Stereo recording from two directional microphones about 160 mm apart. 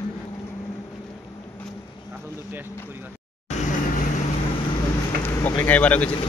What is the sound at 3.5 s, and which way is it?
Vehicle, 45° left (ahead or behind).